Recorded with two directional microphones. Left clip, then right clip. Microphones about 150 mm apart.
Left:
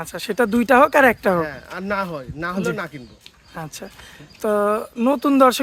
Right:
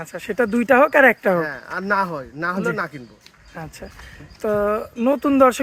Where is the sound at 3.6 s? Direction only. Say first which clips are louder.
Left 2 dB; 25° left (ahead or behind).